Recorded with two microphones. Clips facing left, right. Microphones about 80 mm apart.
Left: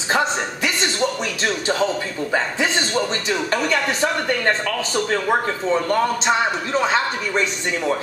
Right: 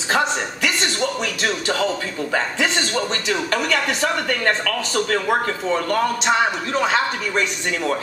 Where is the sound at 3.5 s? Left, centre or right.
Left.